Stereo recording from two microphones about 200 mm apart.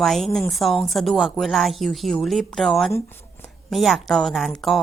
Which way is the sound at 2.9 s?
15° left (ahead or behind).